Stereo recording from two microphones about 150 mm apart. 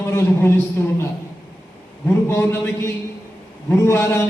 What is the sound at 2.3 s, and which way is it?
Speech, 15° left (ahead or behind).